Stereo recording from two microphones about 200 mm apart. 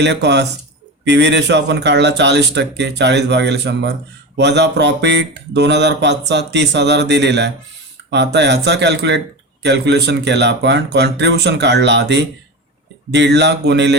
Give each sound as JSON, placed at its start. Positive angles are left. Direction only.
{"t": 0.0, "sound": "speech", "side_deg": -60}